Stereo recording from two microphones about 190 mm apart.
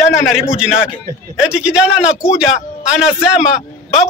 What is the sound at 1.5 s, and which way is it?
Speech, 5° right (ahead or behind).